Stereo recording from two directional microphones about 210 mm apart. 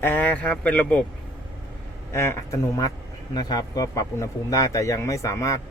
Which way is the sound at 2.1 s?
15° left (ahead or behind).